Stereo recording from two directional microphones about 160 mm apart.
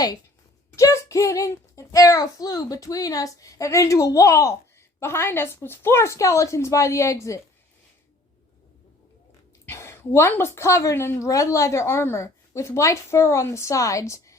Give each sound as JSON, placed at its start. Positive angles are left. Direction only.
{"t": 0.8, "sound": "a child's voice", "side_deg": 20}
{"t": 9.6, "sound": "a woman's voice", "side_deg": 15}